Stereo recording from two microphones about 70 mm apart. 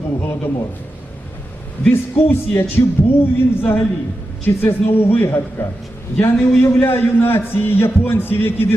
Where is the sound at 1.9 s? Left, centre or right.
Left.